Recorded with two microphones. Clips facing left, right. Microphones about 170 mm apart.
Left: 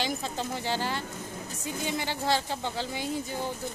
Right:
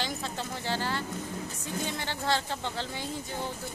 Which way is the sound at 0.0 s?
15° left (ahead or behind).